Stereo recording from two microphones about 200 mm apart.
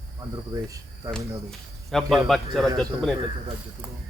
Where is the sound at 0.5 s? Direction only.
15° right (ahead or behind).